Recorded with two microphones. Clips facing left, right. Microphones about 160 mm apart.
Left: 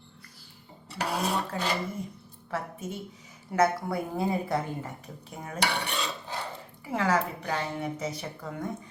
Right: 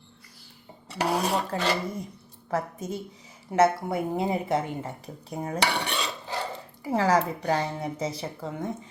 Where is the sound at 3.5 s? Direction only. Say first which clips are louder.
Right 3 dB; 25° right (ahead or behind).